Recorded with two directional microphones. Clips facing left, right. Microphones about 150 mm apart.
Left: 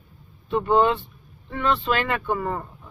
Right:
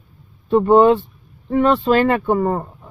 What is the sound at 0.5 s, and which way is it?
Speech, 40° right (ahead or behind).